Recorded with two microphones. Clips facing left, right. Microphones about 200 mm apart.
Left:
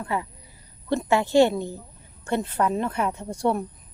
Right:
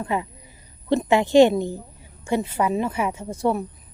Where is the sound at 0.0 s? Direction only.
20° right (ahead or behind).